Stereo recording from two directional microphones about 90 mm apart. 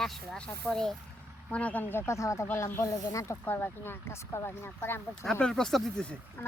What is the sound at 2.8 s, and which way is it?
Speech, 40° left (ahead or behind).